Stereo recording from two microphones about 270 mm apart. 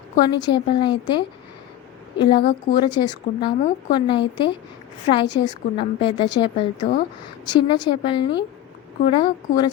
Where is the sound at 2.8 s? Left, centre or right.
Centre.